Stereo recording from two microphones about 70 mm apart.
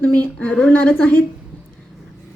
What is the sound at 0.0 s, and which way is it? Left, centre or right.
A woman's voice, left.